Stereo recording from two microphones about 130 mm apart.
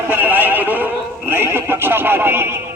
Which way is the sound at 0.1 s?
15° right (ahead or behind).